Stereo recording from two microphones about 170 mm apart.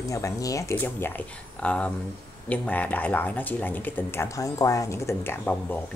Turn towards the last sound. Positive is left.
turn(degrees=10)  # may be behind; listen again after turning